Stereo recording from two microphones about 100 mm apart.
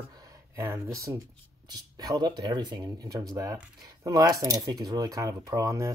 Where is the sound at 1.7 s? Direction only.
40° right (ahead or behind).